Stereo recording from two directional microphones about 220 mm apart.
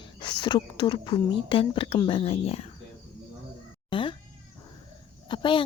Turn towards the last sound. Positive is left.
turn(degrees=20)  # may be behind; listen again after turning